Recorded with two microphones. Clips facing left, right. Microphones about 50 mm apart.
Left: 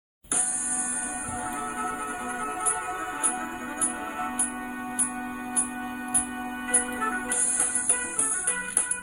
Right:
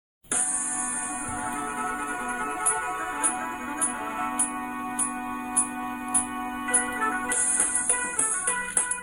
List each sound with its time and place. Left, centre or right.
1.8 s music: right
6.7 s music: right